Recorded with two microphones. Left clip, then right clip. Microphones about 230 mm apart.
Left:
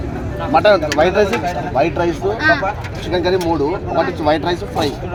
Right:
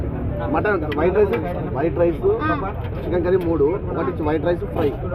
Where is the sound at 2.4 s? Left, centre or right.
Centre.